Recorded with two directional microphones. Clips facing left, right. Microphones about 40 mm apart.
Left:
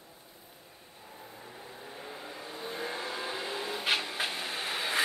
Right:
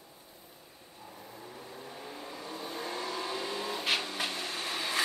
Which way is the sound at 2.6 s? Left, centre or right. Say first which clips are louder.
Left 1 dB; centre.